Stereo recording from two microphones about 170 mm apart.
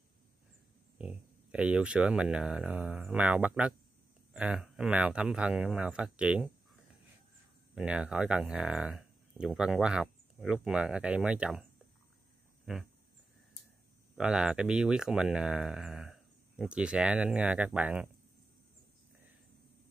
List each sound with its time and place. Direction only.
0.9 s speech: 5° right (ahead or behind)
7.7 s speech: 5° right (ahead or behind)
12.7 s speech: 5° right (ahead or behind)
14.1 s speech: 5° right (ahead or behind)